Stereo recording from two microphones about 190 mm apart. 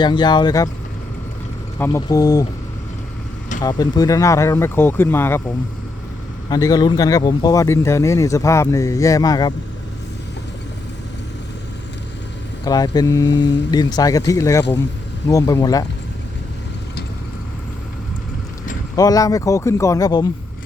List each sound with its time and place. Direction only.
0.0 s speech: 25° left (ahead or behind)
1.8 s speech: 20° left (ahead or behind)
3.6 s speech: 20° left (ahead or behind)
6.5 s speech: 20° left (ahead or behind)
12.6 s speech: 20° left (ahead or behind)
13.3 s speech: 65° left (ahead or behind)
13.7 s speech: 20° left (ahead or behind)
18.9 s speech: 20° left (ahead or behind)